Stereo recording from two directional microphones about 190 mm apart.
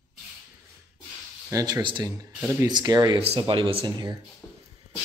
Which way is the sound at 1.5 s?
15° right (ahead or behind).